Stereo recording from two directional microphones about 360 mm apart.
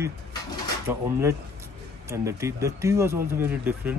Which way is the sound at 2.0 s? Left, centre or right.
Centre.